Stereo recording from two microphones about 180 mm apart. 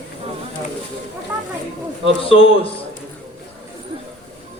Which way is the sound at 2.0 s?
30° left (ahead or behind).